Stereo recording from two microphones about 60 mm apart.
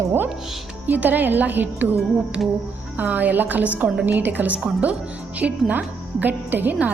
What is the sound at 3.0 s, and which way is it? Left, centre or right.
A woman's voice, right.